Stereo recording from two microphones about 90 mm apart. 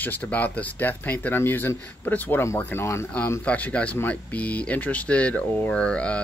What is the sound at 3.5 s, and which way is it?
Speech, 15° left (ahead or behind).